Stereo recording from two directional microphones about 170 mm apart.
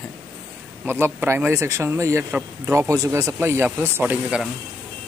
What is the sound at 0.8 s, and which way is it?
Speech, 10° right (ahead or behind).